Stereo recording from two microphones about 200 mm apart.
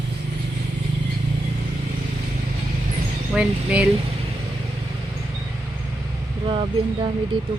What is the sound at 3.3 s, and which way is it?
Speech, 5° right (ahead or behind).